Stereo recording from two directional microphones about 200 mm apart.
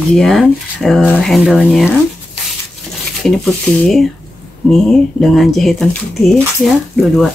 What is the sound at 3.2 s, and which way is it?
Speech, centre (ahead or behind).